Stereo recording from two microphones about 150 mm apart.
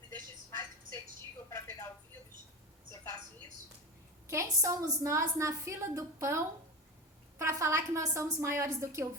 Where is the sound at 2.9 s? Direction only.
20° left (ahead or behind).